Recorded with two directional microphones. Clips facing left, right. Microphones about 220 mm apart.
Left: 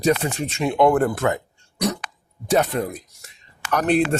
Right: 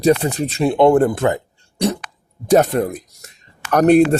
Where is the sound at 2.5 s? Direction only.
45° right (ahead or behind).